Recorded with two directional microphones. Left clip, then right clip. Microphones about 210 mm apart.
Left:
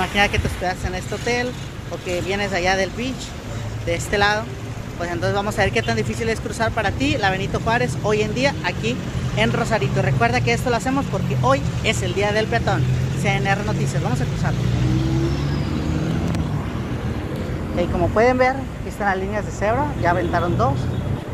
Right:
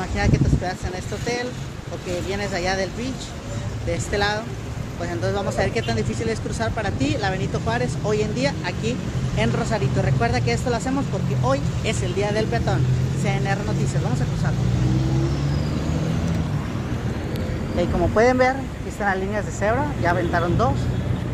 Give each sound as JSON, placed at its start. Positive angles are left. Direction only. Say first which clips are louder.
{"t": 0.1, "sound": "speech", "louder": "left 5 dB", "side_deg": 25}
{"t": 3.9, "sound": "speech", "louder": "left 4 dB", "side_deg": 5}
{"t": 17.7, "sound": "speech", "louder": "left 1 dB", "side_deg": -10}